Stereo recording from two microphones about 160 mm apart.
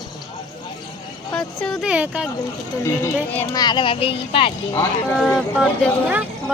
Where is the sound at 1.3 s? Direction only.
5° left (ahead or behind).